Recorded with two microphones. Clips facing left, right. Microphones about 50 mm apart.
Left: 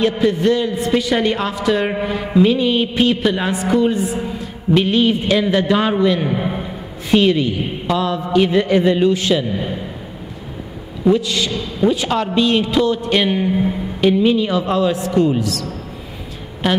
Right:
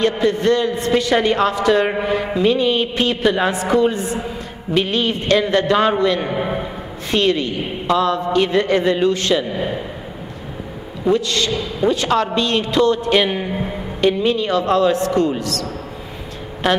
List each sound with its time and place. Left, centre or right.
0.0 s a man's voice: centre
6.2 s a sound: centre
7.1 s a man's voice: centre
9.5 s a man's voice: centre
11.1 s a man's voice: centre
16.6 s a man's voice: centre